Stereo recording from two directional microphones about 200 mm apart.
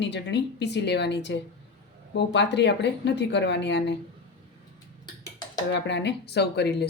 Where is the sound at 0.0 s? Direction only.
60° left (ahead or behind).